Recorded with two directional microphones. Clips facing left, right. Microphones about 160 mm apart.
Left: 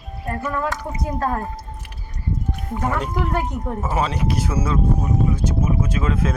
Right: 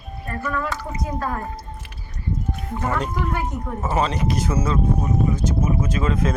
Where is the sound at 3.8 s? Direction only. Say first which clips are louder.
Right 2 dB; 5° left (ahead or behind).